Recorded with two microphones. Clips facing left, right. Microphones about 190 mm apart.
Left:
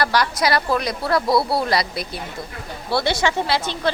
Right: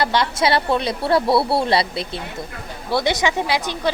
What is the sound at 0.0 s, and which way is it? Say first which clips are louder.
A woman's voice: right 1 dB; 25° right (ahead or behind).